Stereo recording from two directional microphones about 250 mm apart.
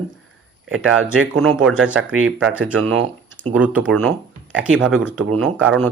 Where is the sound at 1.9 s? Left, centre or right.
Right.